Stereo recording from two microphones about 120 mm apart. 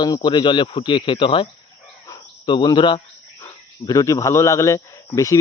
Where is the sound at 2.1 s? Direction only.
40° left (ahead or behind).